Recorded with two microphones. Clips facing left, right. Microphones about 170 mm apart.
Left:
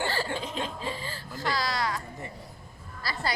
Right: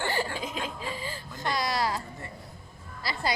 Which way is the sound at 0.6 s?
10° right (ahead or behind).